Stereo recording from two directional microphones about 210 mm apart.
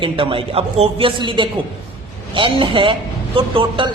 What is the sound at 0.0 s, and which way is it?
A woman's voice, 25° right (ahead or behind).